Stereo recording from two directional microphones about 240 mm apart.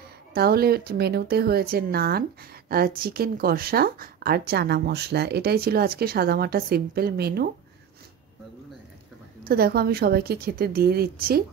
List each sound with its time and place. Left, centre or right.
0.3 s a woman's voice: right
9.5 s a woman's voice: right